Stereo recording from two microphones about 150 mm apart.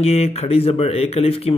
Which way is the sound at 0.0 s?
45° left (ahead or behind).